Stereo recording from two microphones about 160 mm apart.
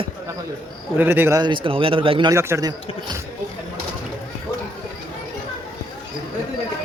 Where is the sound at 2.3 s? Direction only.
20° right (ahead or behind).